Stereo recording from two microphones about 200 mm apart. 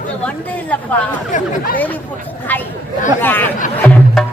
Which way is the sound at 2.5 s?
10° left (ahead or behind).